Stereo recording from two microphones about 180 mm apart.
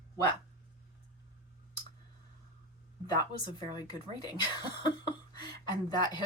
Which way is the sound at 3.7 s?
20° left (ahead or behind).